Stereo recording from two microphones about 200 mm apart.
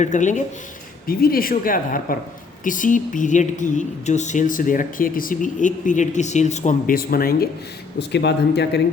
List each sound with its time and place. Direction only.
0.0 s speech: 40° left (ahead or behind)
7.9 s speech: 60° left (ahead or behind)